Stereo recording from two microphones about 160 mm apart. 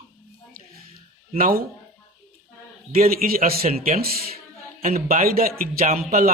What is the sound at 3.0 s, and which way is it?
Speech, 65° right (ahead or behind).